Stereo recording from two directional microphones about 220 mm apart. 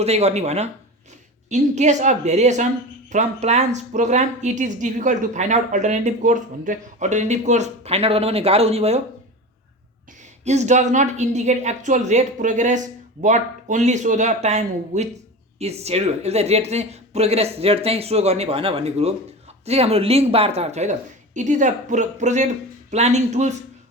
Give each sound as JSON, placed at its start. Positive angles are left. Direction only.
{"t": 0.0, "sound": "speech", "side_deg": -30}
{"t": 10.4, "sound": "speech", "side_deg": -30}